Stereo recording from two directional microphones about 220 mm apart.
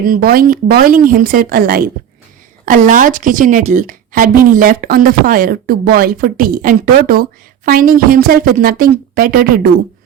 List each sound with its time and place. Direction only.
0.0 s a woman's voice: 40° right (ahead or behind)